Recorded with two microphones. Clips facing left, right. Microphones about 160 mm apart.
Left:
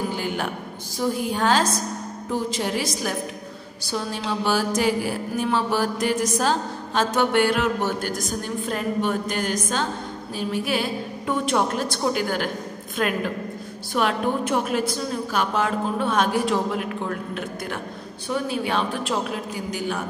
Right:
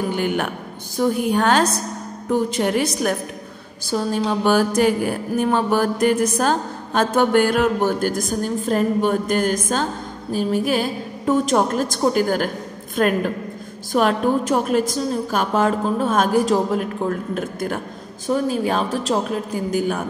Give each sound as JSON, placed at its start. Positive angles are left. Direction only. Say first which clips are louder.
{"t": 0.1, "sound": "a woman's voice", "louder": "right 5 dB", "side_deg": -60}
{"t": 3.9, "sound": "mantra", "louder": "right 6 dB", "side_deg": -45}
{"t": 18.3, "sound": "a woman's voice", "louder": "right 5 dB", "side_deg": -40}